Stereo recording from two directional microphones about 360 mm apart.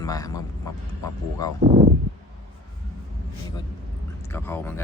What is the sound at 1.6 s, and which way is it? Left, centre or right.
Speech, right.